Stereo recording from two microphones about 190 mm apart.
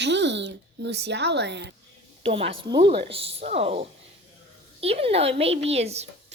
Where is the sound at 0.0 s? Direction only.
65° right (ahead or behind).